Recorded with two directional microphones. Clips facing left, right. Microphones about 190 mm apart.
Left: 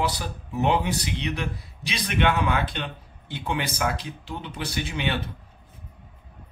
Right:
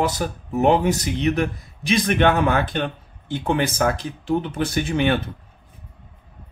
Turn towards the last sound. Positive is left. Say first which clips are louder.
# right 8 dB
turn(degrees=-50)  # may be behind; listen again after turning